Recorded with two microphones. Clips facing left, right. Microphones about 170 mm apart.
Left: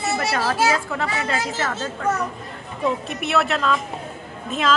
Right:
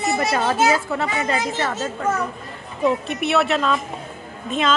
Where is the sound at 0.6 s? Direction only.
Centre (ahead or behind).